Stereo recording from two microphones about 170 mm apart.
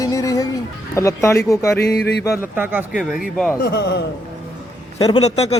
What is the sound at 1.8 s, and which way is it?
Mantra, 75° left (ahead or behind).